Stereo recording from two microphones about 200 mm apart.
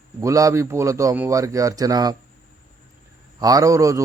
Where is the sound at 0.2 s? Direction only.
15° right (ahead or behind).